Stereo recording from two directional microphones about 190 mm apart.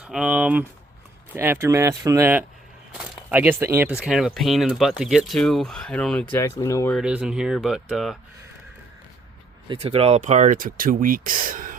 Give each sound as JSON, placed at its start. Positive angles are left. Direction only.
{"t": 0.0, "sound": "speech", "side_deg": -5}
{"t": 6.3, "sound": "speech", "side_deg": 15}
{"t": 6.9, "sound": "speech", "side_deg": -5}
{"t": 9.6, "sound": "speech", "side_deg": -30}